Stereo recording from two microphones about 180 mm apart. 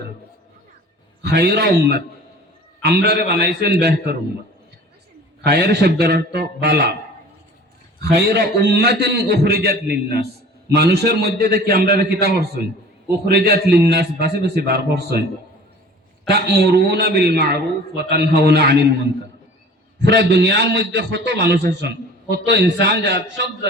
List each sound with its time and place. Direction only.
1.2 s a man's voice: 65° right (ahead or behind)
5.5 s a man's voice: 65° right (ahead or behind)
8.1 s a man's voice: 65° right (ahead or behind)
16.3 s a man's voice: 65° right (ahead or behind)
20.1 s a man's voice: 70° right (ahead or behind)